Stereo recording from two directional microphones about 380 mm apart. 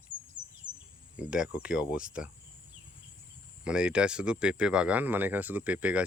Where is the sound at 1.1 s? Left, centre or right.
Centre.